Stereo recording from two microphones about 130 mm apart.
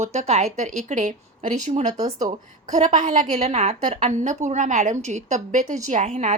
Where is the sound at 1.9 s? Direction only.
30° right (ahead or behind).